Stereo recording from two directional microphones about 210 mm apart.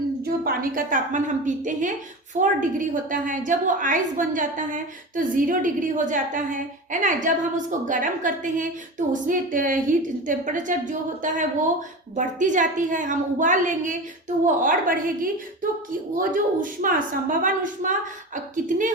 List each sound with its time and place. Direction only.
0.2 s a woman's voice: 45° right (ahead or behind)